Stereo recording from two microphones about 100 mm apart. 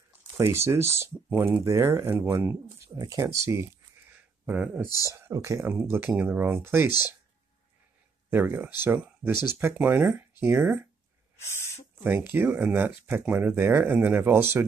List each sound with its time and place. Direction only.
0.4 s speech: 25° right (ahead or behind)
3.0 s speech: 35° right (ahead or behind)
4.5 s speech: 10° right (ahead or behind)
4.8 s speech: 35° left (ahead or behind)
5.1 s speech: 30° right (ahead or behind)
8.3 s speech: 20° right (ahead or behind)
11.3 s speech: 25° left (ahead or behind)
12.0 s speech: 20° right (ahead or behind)